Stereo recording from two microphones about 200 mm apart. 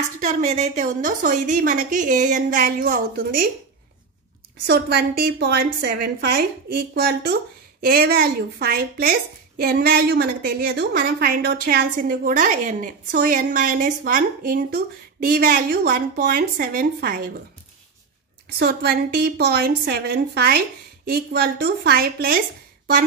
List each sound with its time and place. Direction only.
0.2 s a woman's voice: 35° right (ahead or behind)
4.6 s a woman's voice: 55° right (ahead or behind)
18.6 s a woman's voice: 55° right (ahead or behind)